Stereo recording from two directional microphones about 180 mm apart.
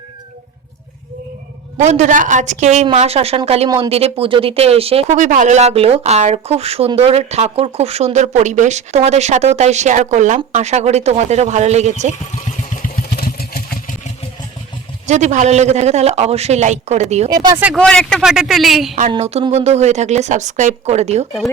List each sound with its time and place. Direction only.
1.8 s speech: 40° right (ahead or behind)
12.7 s vehicle: 55° left (ahead or behind)
15.0 s speech: 40° right (ahead or behind)
17.2 s speech: 20° right (ahead or behind)
17.7 s speech: 5° left (ahead or behind)
19.2 s speech: 35° right (ahead or behind)